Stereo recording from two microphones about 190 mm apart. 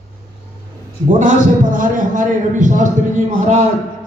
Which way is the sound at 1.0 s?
45° right (ahead or behind).